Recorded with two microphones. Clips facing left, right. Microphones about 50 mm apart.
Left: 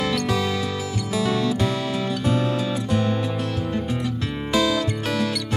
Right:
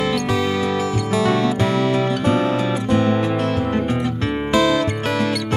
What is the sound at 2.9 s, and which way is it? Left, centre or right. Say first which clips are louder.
Music: right 7 dB; right.